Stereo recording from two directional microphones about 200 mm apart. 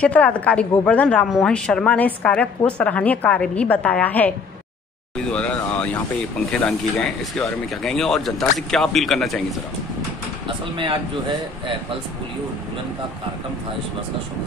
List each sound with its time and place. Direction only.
0.0 s a woman's voice: 5° left (ahead or behind)
10.6 s speech: 25° right (ahead or behind)